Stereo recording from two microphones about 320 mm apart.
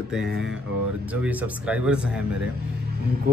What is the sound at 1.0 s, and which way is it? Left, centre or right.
A man's voice, centre.